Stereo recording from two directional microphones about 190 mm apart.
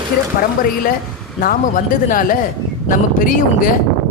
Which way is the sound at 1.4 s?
45° left (ahead or behind).